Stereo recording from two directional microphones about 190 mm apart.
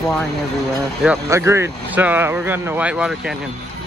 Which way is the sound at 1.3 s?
15° right (ahead or behind).